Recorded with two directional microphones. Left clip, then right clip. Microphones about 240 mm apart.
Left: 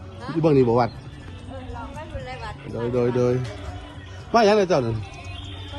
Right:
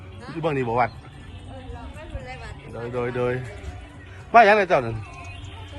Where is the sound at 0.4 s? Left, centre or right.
Centre.